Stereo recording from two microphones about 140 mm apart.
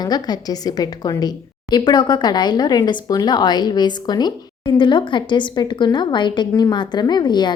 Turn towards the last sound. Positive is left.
turn(degrees=30)  # may be behind; listen again after turning